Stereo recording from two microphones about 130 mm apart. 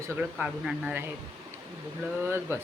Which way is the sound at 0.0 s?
15° right (ahead or behind).